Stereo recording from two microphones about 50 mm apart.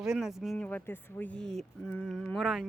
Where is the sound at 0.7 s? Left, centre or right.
Left.